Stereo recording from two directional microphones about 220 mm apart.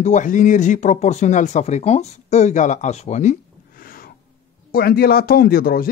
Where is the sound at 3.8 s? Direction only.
40° left (ahead or behind).